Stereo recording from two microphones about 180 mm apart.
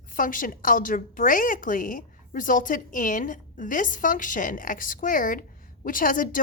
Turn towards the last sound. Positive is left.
turn(degrees=50)  # may be behind; listen again after turning